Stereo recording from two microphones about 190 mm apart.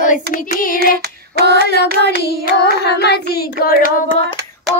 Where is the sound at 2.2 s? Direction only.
55° left (ahead or behind).